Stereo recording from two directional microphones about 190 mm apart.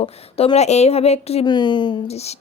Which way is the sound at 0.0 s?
30° left (ahead or behind).